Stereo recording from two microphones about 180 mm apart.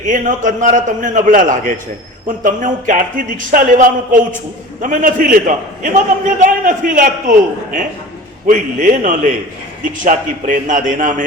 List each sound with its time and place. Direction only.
0.1 s speech: 45° right (ahead or behind)